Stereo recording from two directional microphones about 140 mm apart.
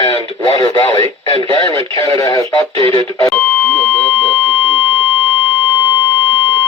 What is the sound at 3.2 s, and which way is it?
Beep, 5° left (ahead or behind).